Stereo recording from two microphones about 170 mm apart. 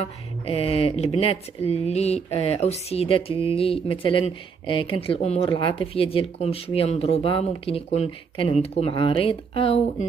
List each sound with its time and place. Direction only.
0.0 s speech: 35° left (ahead or behind)